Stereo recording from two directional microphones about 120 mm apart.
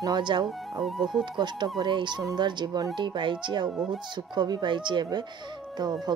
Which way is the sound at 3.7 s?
5° right (ahead or behind).